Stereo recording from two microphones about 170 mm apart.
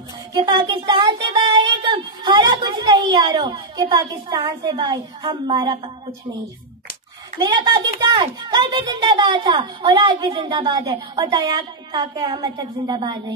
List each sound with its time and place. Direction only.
0.3 s a child's voice: 25° right (ahead or behind)
7.3 s a child's voice: 25° right (ahead or behind)